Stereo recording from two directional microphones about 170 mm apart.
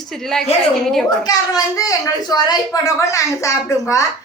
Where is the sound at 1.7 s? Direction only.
20° left (ahead or behind).